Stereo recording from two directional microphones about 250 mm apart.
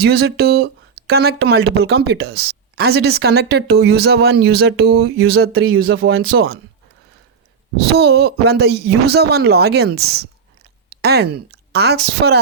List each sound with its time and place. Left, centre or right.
0.0 s a woman's voice: right
5.5 s speech: right
7.8 s a woman's voice: right